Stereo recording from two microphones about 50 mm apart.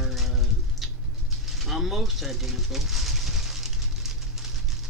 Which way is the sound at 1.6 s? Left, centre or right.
Centre.